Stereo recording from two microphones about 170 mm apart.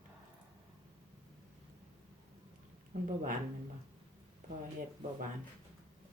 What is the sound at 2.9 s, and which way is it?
Speech, 45° right (ahead or behind).